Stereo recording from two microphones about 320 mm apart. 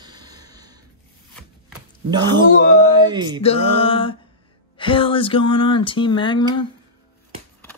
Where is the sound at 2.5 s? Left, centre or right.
Left.